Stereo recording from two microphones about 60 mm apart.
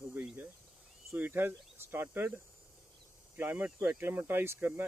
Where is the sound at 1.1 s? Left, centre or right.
Right.